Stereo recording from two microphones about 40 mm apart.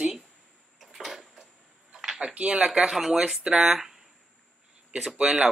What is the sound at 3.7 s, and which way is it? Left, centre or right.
Speech, centre.